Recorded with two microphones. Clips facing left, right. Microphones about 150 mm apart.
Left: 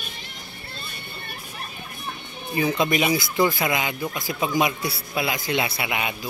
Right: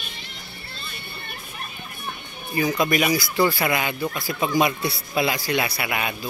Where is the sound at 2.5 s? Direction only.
25° left (ahead or behind).